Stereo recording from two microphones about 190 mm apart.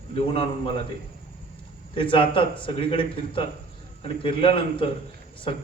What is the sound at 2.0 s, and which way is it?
A man's voice, 25° left (ahead or behind).